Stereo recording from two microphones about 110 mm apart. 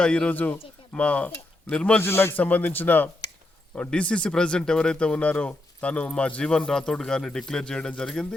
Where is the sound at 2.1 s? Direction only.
20° left (ahead or behind).